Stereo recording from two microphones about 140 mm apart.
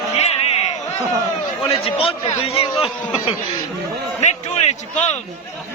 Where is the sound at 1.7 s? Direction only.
45° left (ahead or behind).